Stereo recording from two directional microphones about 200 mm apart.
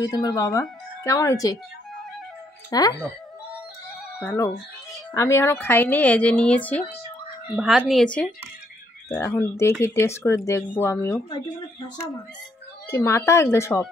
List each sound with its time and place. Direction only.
0.0 s speech: 20° left (ahead or behind)
2.7 s speech: 20° left (ahead or behind)
4.2 s speech: 10° left (ahead or behind)
12.8 s speech: 15° left (ahead or behind)